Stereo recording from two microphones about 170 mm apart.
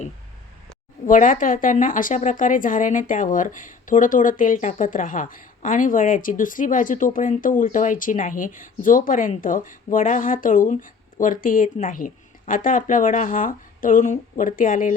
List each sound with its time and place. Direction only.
1.0 s a woman's voice: 50° left (ahead or behind)